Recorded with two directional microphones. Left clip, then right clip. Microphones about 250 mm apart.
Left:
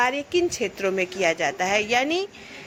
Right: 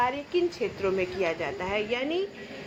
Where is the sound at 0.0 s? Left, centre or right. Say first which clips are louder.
Left 4 dB; left.